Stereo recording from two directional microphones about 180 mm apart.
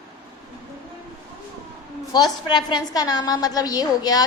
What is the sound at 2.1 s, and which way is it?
A woman's voice, 25° left (ahead or behind).